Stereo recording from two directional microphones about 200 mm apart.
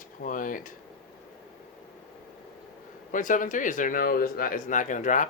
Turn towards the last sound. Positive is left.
turn(degrees=40)  # may be behind; listen again after turning